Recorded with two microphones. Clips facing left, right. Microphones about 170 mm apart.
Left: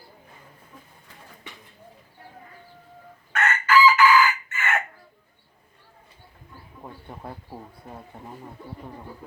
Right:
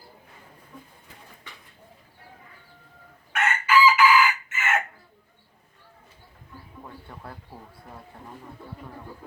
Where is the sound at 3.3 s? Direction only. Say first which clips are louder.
Left 1 dB; 10° right (ahead or behind).